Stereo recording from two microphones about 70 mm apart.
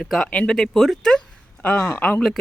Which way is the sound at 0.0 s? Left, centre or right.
Centre.